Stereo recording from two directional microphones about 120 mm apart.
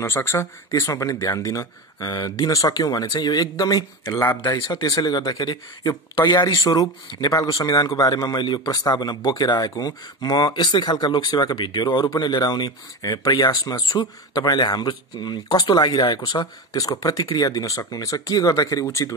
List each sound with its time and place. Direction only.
0.0 s speech: 20° left (ahead or behind)